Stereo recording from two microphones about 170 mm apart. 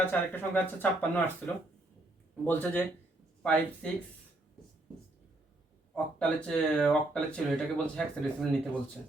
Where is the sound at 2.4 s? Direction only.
10° left (ahead or behind).